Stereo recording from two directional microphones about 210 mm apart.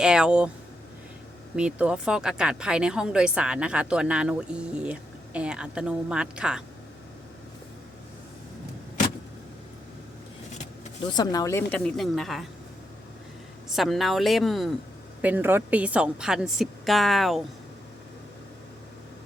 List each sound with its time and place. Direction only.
0.0 s speech: 5° right (ahead or behind)
1.5 s speech: 5° right (ahead or behind)
11.2 s a woman's voice: 15° left (ahead or behind); by 12.5 s centre (ahead or behind)
13.7 s speech: centre (ahead or behind)